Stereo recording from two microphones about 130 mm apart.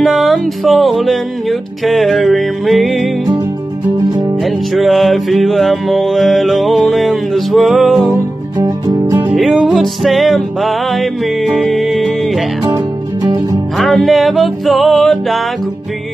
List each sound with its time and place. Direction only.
0.0 s music: centre (ahead or behind)
4.7 s music: centre (ahead or behind)
8.5 s music: 30° right (ahead or behind)
9.3 s music: centre (ahead or behind)
12.6 s music: 30° right (ahead or behind)
13.7 s music: centre (ahead or behind)